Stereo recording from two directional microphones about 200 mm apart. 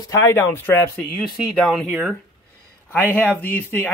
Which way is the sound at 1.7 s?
Centre (ahead or behind).